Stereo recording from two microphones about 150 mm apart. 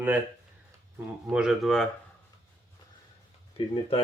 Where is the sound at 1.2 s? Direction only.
5° right (ahead or behind).